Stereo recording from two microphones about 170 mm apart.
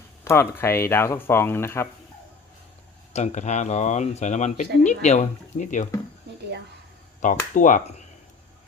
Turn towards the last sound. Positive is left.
turn(degrees=50)  # may be behind; listen again after turning